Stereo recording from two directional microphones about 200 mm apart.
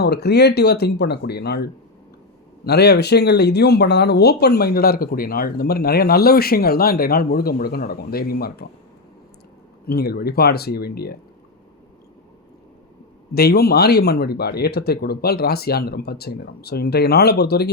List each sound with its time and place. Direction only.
0.0 s speech: 55° left (ahead or behind)
9.8 s speech: 50° left (ahead or behind)
13.3 s speech: 50° left (ahead or behind)